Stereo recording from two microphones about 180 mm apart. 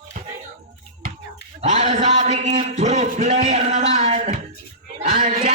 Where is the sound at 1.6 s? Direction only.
35° right (ahead or behind).